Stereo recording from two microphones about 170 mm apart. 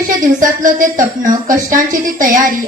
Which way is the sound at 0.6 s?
50° right (ahead or behind).